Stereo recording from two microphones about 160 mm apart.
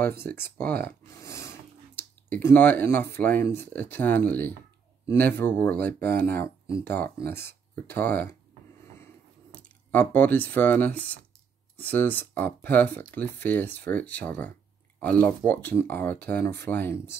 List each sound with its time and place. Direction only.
0.0 s speech: 15° left (ahead or behind)
0.7 s speech: 80° right
1.2 s a sound: 20° left (ahead or behind)
3.2 s speech: 15° left (ahead or behind)
8.9 s drip: 10° left (ahead or behind)
11.7 s speech: 10° left (ahead or behind)